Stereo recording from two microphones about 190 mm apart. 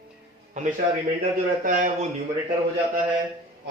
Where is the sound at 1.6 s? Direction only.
40° right (ahead or behind).